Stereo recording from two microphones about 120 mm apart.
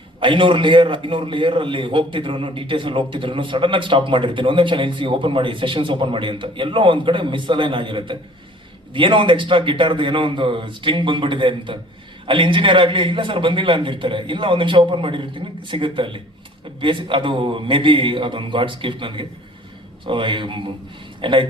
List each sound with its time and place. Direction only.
0.2 s a man's voice: 45° right (ahead or behind)